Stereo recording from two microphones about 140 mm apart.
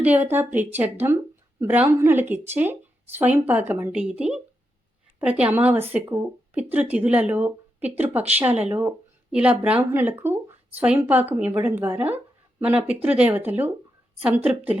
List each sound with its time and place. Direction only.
0.0 s speech: 10° right (ahead or behind)